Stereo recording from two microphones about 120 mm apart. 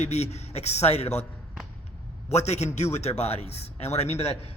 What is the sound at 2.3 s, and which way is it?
A man's voice, 70° left (ahead or behind).